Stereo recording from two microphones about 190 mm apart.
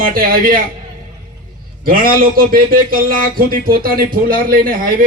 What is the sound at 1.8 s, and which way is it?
A man's voice, 50° right (ahead or behind).